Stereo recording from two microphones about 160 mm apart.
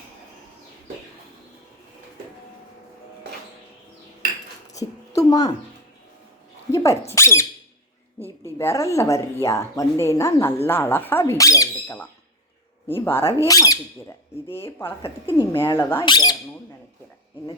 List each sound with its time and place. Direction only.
4.7 s a sound: 20° left (ahead or behind)
6.7 s dog: 20° left (ahead or behind)
7.0 s speech: 15° left (ahead or behind)
8.5 s speech: 20° left (ahead or behind)
12.9 s speech: 15° left (ahead or behind)
16.0 s speech: 25° left (ahead or behind)